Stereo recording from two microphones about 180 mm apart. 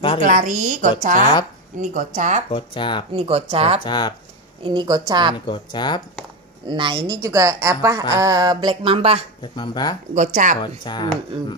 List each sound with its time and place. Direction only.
0.2 s a woman's voice: 45° right (ahead or behind)
2.5 s speech: 30° left (ahead or behind)
3.1 s speech: 30° right (ahead or behind)
3.8 s speech: 25° left (ahead or behind)
4.6 s a sound: 25° right (ahead or behind)
5.5 s speech: 25° left (ahead or behind)
6.6 s a woman's voice: 25° right (ahead or behind)
8.1 s a sound: 20° right (ahead or behind)
9.4 s speech: 25° left (ahead or behind)
10.1 s a woman's voice: 45° right (ahead or behind)
10.8 s speech: 25° left (ahead or behind)